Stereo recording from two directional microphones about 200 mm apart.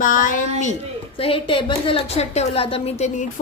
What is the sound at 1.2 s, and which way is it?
A woman's voice, 25° left (ahead or behind).